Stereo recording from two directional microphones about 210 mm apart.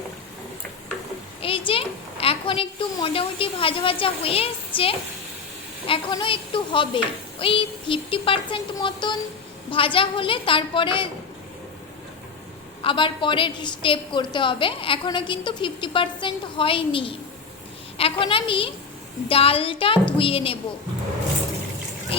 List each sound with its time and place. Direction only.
1.4 s a woman's voice: 25° left (ahead or behind)
12.8 s a woman's voice: 25° left (ahead or behind)